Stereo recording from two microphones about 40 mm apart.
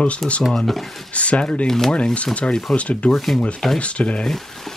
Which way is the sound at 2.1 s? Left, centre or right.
Left.